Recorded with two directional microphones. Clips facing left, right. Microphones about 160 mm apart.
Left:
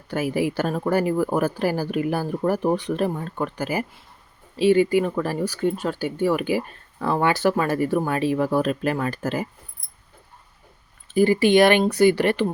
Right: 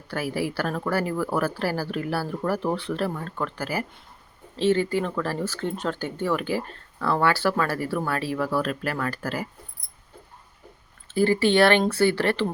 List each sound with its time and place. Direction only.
0.1 s speech: 20° left (ahead or behind)
11.1 s speech: 15° left (ahead or behind)